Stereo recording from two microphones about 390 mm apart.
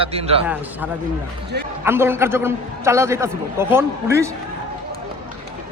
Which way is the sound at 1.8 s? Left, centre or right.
Centre.